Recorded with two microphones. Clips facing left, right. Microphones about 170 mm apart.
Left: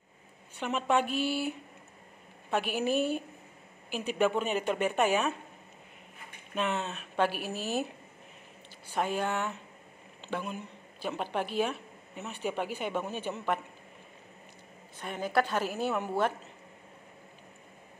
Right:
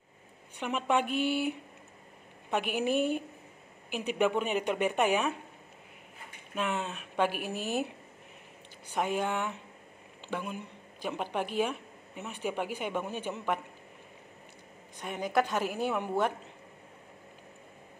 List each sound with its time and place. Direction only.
0.6 s speech: 15° right (ahead or behind)
2.5 s speech: 15° right (ahead or behind)
6.5 s speech: 10° right (ahead or behind)
8.9 s speech: 15° right (ahead or behind)
15.0 s speech: 15° right (ahead or behind)